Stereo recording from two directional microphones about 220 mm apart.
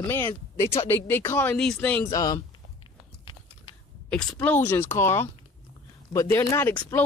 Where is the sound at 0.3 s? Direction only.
20° left (ahead or behind).